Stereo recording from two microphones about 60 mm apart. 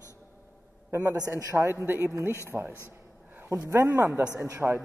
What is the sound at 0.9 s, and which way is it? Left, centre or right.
Speech, right.